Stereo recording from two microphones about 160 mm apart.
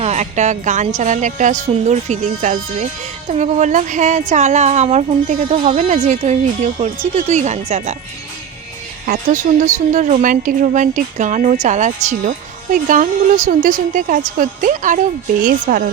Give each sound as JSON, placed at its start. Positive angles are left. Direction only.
{"t": 0.0, "sound": "a woman's voice", "side_deg": -45}
{"t": 9.0, "sound": "a woman's voice", "side_deg": -50}